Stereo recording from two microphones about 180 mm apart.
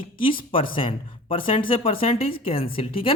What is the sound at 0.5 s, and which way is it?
Speech, 30° left (ahead or behind).